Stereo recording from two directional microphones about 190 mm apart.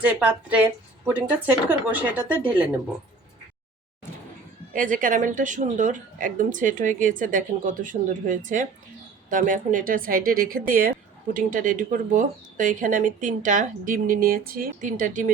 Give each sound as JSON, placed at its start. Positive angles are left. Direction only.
{"t": 0.0, "sound": "a woman's voice", "side_deg": -5}
{"t": 4.7, "sound": "speech", "side_deg": -45}